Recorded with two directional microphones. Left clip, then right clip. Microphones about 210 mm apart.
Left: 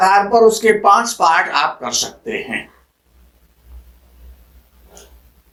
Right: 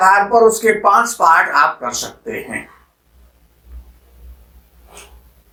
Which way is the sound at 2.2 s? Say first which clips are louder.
Left 2 dB; 40° left (ahead or behind).